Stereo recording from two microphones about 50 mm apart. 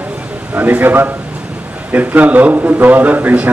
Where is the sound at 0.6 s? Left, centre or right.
Right.